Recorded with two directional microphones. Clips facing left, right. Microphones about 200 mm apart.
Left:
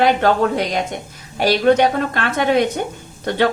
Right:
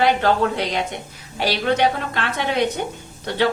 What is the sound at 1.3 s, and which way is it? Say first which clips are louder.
A woman's voice: left 6 dB; 45° left (ahead or behind).